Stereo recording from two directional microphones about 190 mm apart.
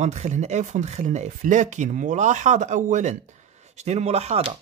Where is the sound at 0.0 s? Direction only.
40° right (ahead or behind).